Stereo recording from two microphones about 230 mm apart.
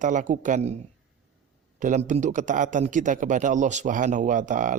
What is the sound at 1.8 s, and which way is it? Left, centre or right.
Speech, right.